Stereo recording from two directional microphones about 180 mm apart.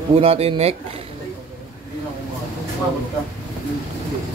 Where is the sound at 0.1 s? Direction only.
35° right (ahead or behind).